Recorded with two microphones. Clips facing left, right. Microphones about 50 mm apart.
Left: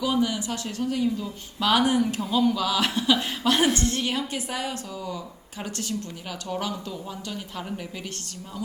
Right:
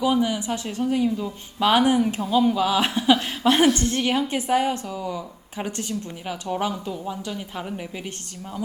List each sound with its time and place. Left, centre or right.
0.0 s a woman's voice: right